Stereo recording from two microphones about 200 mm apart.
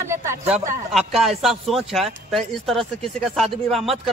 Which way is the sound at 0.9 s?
Centre (ahead or behind).